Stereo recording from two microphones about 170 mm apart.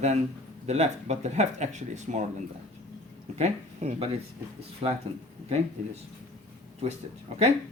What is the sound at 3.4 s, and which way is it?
Speech, 40° right (ahead or behind).